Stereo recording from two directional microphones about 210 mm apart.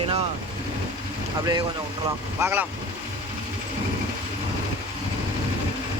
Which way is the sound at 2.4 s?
10° right (ahead or behind).